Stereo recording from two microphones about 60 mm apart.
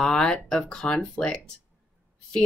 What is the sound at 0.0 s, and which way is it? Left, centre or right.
Speech, centre.